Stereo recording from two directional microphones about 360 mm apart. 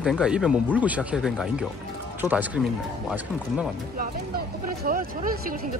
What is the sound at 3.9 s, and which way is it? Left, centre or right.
Speech, right.